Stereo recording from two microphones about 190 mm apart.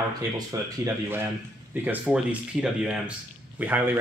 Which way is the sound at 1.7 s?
10° right (ahead or behind).